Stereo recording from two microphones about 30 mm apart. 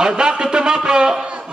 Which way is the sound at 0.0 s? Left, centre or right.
Right.